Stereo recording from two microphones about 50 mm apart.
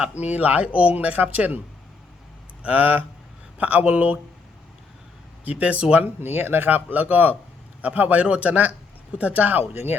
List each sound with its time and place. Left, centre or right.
0.2 s speech: right
2.6 s speech: right
5.5 s speech: right
6.1 s speech: right
9.7 s speech: right